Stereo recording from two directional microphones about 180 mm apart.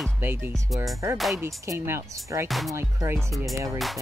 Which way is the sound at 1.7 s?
15° right (ahead or behind).